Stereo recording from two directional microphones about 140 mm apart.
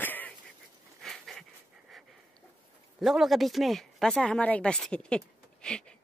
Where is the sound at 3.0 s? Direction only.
Centre (ahead or behind).